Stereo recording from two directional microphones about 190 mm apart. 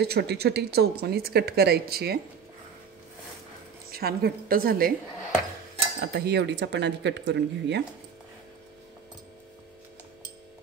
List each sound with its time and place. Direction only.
0.0 s speech: 55° right (ahead or behind)
3.9 s a woman's voice: 55° right (ahead or behind)
5.9 s speech: 60° right (ahead or behind)